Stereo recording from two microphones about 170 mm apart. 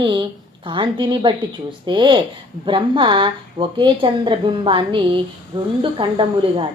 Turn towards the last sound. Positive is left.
turn(degrees=-30)  # may be behind; listen again after turning